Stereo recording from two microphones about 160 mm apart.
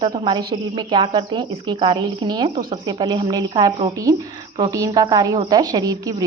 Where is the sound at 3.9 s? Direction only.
20° right (ahead or behind).